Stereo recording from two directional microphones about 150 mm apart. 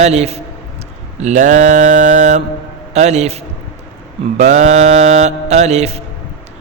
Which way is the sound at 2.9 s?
45° right (ahead or behind).